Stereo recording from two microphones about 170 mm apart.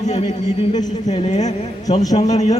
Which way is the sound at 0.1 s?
40° left (ahead or behind).